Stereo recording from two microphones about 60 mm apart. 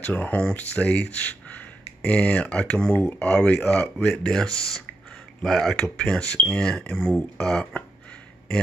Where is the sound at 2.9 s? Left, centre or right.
Left.